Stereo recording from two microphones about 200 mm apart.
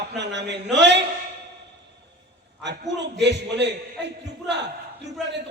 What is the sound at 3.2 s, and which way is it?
A man's voice, 60° right (ahead or behind).